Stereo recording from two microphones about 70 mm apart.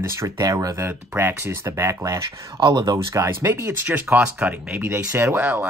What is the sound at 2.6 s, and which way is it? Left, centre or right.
Speech, right.